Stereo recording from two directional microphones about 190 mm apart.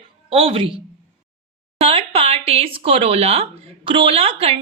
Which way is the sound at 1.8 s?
30° right (ahead or behind).